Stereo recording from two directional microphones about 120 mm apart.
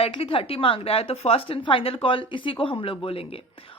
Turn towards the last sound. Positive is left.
turn(degrees=50)  # may be behind; listen again after turning